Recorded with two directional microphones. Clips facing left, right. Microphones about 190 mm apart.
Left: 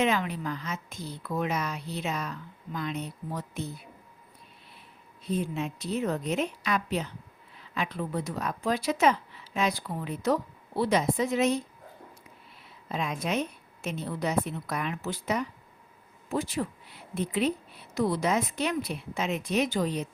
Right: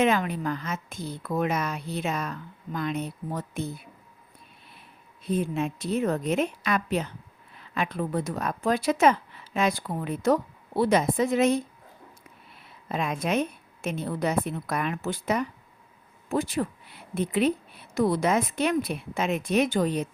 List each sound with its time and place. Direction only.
0.0 s speech: 50° right (ahead or behind)
5.3 s speech: 55° right (ahead or behind)
12.9 s speech: 55° right (ahead or behind)